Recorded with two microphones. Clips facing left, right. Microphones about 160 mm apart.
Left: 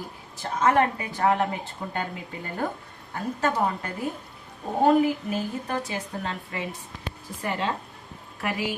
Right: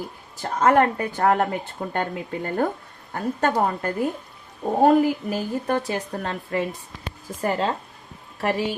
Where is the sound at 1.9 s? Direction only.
50° right (ahead or behind).